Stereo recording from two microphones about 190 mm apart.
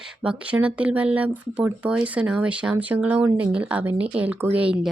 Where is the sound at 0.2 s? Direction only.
5° right (ahead or behind).